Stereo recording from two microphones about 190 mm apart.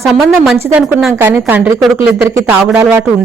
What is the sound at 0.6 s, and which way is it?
Speech, 10° right (ahead or behind).